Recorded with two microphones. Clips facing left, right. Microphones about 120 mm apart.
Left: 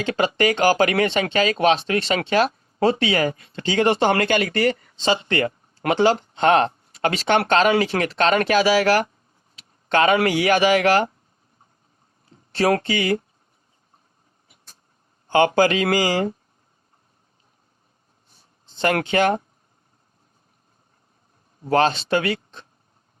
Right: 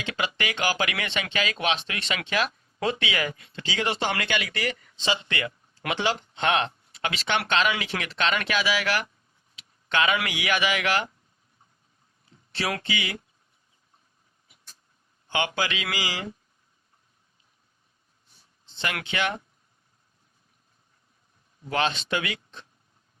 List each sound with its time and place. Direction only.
0.0 s speech: 40° left (ahead or behind)
12.3 s speech: 45° left (ahead or behind)
14.4 s vehicle: 45° left (ahead or behind)
15.3 s speech: 40° left (ahead or behind)
18.6 s speech: 45° left (ahead or behind)
21.6 s speech: 40° left (ahead or behind)